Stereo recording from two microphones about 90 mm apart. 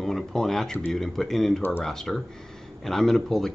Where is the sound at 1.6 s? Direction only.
25° left (ahead or behind).